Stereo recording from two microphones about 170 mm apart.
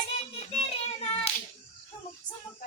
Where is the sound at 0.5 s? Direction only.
35° left (ahead or behind).